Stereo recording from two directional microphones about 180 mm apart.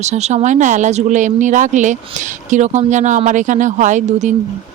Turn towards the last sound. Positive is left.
turn(degrees=-40)  # may be behind; listen again after turning